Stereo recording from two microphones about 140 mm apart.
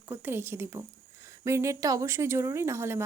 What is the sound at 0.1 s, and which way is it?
A woman's voice, 15° right (ahead or behind).